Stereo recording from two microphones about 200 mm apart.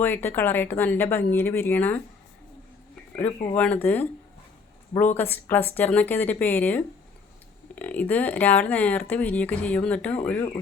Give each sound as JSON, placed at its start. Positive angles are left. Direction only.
{"t": 0.0, "sound": "speech", "side_deg": 10}
{"t": 3.5, "sound": "speech", "side_deg": 5}
{"t": 10.2, "sound": "speech", "side_deg": 15}